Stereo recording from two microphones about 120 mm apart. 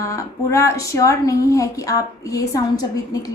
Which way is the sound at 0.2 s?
25° left (ahead or behind).